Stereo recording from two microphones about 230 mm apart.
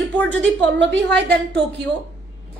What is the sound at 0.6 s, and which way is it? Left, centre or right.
Speech, right.